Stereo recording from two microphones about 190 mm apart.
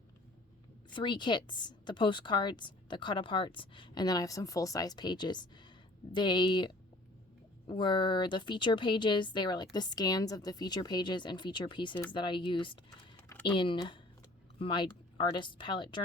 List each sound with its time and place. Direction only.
0.9 s a woman's voice: 25° left (ahead or behind)